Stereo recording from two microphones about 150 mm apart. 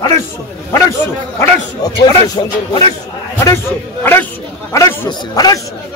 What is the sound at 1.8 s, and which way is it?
A man's voice, 25° left (ahead or behind).